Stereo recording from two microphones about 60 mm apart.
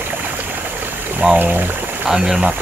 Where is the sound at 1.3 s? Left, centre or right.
Right.